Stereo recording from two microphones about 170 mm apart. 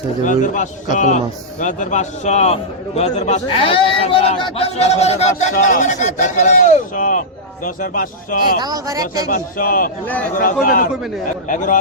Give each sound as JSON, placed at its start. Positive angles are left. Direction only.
{"t": 0.3, "sound": "a man's voice", "side_deg": 50}
{"t": 8.5, "sound": "speech", "side_deg": -20}
{"t": 9.3, "sound": "a man's voice", "side_deg": 55}